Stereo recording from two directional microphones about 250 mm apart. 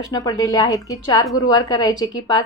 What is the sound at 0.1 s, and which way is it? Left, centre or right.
A woman's voice, centre.